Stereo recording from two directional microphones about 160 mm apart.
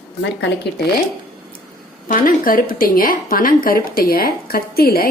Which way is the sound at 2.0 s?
60° left (ahead or behind).